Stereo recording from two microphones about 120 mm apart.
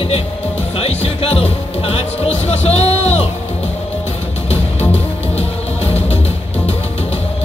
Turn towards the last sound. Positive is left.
turn(degrees=60)  # may be behind; listen again after turning